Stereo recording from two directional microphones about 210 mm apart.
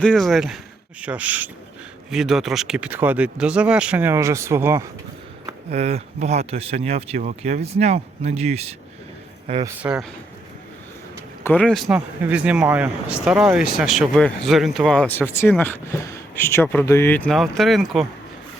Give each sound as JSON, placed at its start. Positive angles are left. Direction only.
{"t": 0.0, "sound": "speech", "side_deg": 0}
{"t": 5.7, "sound": "speech", "side_deg": -30}
{"t": 9.6, "sound": "speech", "side_deg": -5}
{"t": 11.4, "sound": "speech", "side_deg": 5}